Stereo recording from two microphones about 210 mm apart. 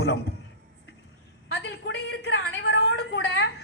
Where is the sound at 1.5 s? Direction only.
50° left (ahead or behind).